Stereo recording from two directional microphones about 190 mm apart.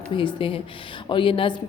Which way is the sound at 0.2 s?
25° left (ahead or behind).